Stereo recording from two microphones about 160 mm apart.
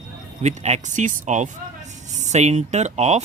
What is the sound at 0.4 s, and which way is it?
Speech, 45° right (ahead or behind).